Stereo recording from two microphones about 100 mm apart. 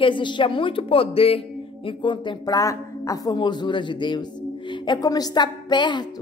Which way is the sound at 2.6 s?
35° left (ahead or behind).